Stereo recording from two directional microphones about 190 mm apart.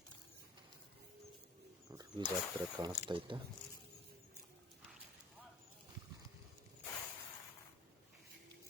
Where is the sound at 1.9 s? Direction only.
20° right (ahead or behind).